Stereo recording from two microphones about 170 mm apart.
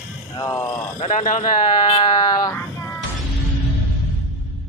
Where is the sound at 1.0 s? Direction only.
45° left (ahead or behind).